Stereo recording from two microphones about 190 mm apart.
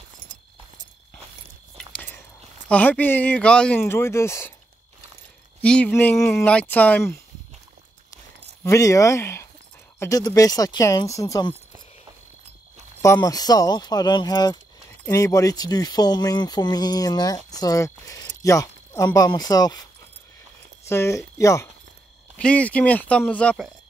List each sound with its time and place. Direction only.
1.8 s a sound: 5° left (ahead or behind)
2.7 s speech: 10° left (ahead or behind)
5.6 s speech: 5° left (ahead or behind)
8.6 s speech: 15° left (ahead or behind)
13.0 s speech: 15° left (ahead or behind)
20.9 s speech: 15° left (ahead or behind)